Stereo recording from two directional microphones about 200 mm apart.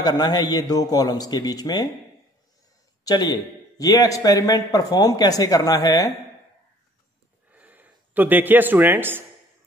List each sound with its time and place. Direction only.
0.0 s a man's voice: 20° left (ahead or behind)
3.1 s a man's voice: 20° left (ahead or behind)
7.5 s a man's voice: 10° right (ahead or behind)